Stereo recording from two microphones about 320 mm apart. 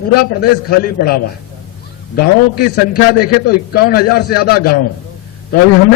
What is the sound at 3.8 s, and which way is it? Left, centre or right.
Speech, left.